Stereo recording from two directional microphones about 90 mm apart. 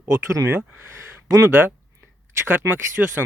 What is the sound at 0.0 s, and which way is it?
Speech, 30° right (ahead or behind).